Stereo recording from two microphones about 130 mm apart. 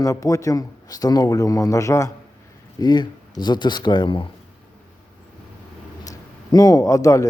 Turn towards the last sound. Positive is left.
turn(degrees=25)  # may be behind; listen again after turning